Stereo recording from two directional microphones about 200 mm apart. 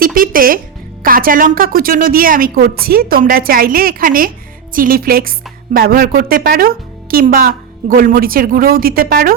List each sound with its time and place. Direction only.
0.0 s a woman's voice: 45° right (ahead or behind)